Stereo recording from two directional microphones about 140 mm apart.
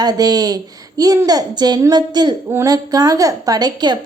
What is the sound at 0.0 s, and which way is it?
A woman's voice, 25° right (ahead or behind).